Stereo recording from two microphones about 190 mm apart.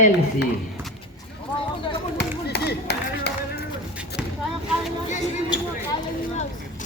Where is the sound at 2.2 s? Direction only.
60° left (ahead or behind).